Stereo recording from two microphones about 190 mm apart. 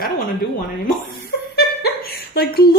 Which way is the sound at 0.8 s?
55° left (ahead or behind).